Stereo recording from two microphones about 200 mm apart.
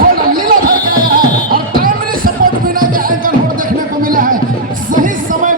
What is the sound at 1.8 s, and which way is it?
Music, 45° right (ahead or behind).